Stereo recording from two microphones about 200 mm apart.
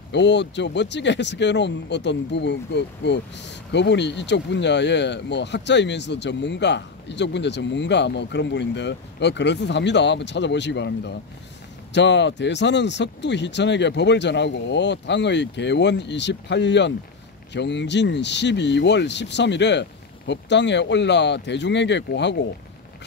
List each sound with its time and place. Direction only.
0.1 s speech: 60° left (ahead or behind)